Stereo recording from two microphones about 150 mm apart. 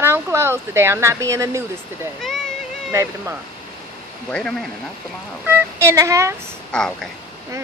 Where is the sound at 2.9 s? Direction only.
20° right (ahead or behind).